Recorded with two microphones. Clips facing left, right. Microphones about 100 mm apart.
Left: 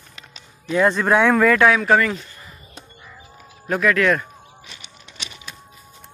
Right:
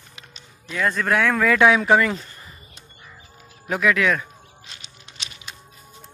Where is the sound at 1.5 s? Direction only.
15° right (ahead or behind).